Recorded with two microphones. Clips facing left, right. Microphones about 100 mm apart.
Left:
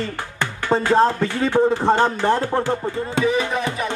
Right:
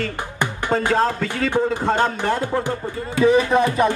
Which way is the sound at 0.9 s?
20° left (ahead or behind).